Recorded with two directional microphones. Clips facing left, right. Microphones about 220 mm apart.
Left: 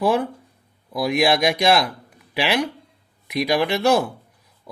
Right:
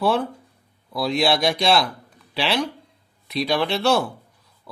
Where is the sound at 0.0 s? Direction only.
15° left (ahead or behind).